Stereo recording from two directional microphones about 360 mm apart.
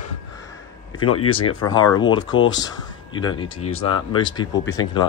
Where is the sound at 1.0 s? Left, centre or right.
Left.